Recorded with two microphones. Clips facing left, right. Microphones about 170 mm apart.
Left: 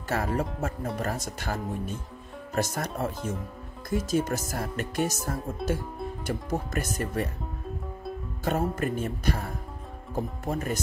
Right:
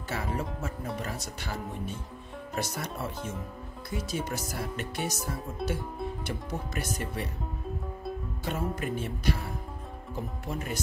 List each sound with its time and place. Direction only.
0.1 s speech: 45° left (ahead or behind)
5.6 s speech: centre (ahead or behind)
6.2 s speech: 45° left (ahead or behind)
8.5 s speech: 45° left (ahead or behind)